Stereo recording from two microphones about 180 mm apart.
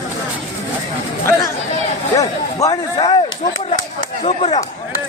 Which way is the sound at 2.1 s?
20° left (ahead or behind).